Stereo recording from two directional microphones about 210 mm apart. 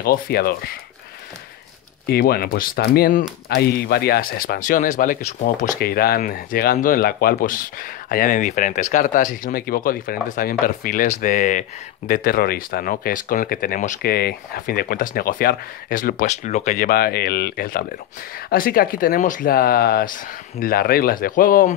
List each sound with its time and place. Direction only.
0.0 s speech: 45° left (ahead or behind)
2.0 s speech: 45° left (ahead or behind)